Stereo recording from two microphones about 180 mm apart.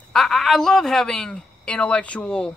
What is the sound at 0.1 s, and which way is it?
Speech, centre (ahead or behind).